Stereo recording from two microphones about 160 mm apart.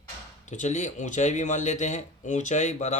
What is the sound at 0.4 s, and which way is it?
Speech, 50° left (ahead or behind).